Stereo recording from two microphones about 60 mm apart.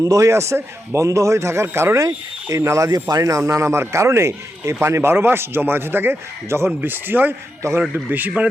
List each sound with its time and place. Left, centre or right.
0.0 s speech: right
2.0 s a man's voice: right